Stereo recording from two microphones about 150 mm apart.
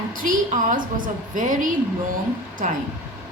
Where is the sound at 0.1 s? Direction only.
65° right (ahead or behind).